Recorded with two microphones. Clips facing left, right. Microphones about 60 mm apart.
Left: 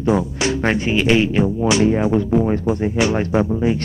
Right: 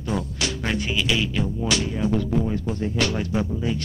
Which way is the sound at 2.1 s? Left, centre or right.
Left.